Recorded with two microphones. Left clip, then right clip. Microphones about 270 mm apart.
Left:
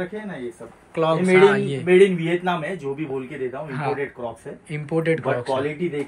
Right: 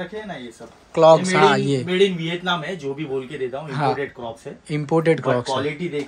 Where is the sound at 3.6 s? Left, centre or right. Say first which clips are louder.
Right 5 dB; centre.